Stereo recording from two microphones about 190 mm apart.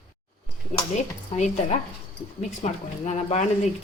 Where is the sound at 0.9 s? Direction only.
35° left (ahead or behind).